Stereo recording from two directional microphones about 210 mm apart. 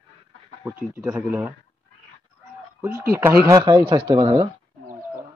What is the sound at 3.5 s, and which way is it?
Speech, 20° right (ahead or behind).